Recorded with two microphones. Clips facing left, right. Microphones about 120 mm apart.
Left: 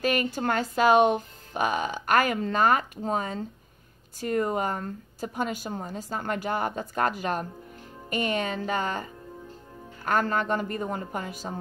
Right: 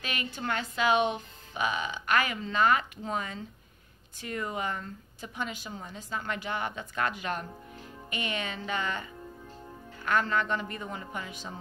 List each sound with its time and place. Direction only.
0.0 s speech: 45° left (ahead or behind)